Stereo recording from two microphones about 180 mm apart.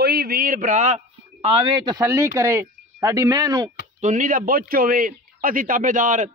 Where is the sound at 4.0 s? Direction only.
45° right (ahead or behind).